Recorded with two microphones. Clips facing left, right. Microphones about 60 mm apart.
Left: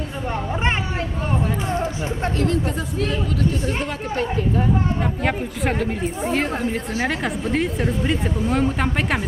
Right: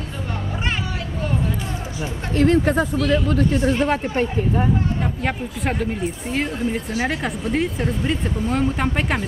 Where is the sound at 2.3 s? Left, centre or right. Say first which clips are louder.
Right 9 dB; right.